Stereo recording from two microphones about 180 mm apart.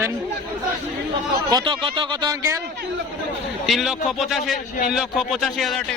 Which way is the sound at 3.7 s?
Centre (ahead or behind).